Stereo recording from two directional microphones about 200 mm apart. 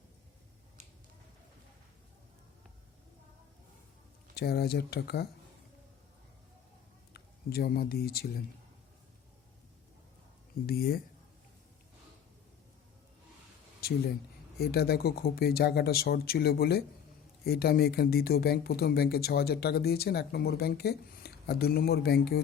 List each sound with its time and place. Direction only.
4.4 s speech: 50° left (ahead or behind)
7.1 s speech: 50° left (ahead or behind)
10.7 s speech: 50° left (ahead or behind)
14.6 s speech: 50° left (ahead or behind)